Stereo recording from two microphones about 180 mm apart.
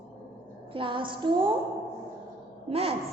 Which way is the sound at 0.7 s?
30° right (ahead or behind).